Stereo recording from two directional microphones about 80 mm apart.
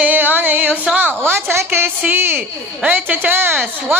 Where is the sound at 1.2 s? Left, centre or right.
Right.